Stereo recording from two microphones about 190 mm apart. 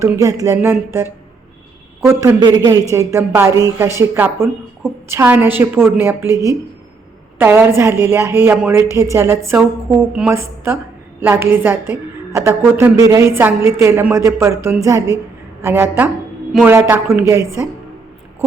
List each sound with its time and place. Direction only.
0.0 s a woman's voice: 15° right (ahead or behind)
2.0 s a woman's voice: 15° right (ahead or behind)
6.2 s speech: 20° left (ahead or behind)
7.3 s a woman's voice: 10° right (ahead or behind)